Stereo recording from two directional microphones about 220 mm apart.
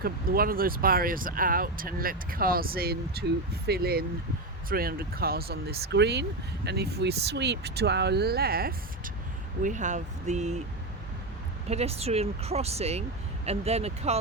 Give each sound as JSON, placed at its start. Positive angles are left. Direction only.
{"t": 0.0, "sound": "speech", "side_deg": -40}
{"t": 11.7, "sound": "speech", "side_deg": -30}